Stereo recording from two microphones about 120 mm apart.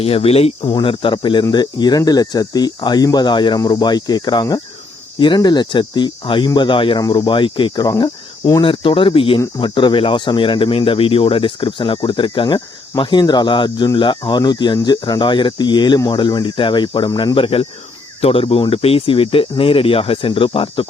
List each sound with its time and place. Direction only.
0.0 s speech: 55° left (ahead or behind)
0.7 s speech: 45° left (ahead or behind)
7.9 s cricket: 30° left (ahead or behind)
8.6 s speech: 45° left (ahead or behind)
17.3 s speech: 50° left (ahead or behind)